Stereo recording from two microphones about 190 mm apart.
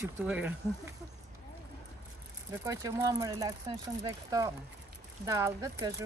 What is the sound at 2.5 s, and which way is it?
Speech, 15° right (ahead or behind).